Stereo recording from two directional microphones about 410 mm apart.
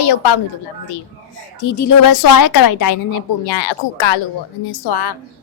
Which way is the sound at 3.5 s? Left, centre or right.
Left.